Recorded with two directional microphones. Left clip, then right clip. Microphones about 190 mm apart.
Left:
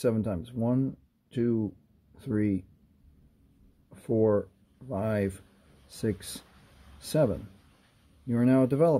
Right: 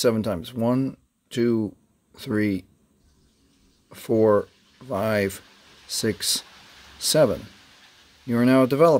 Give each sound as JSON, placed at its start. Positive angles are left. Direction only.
{"t": 0.0, "sound": "speech", "side_deg": -20}
{"t": 3.9, "sound": "speech", "side_deg": -20}
{"t": 8.3, "sound": "speech", "side_deg": -20}